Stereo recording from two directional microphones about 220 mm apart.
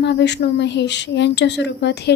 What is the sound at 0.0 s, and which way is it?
Speech, 50° left (ahead or behind).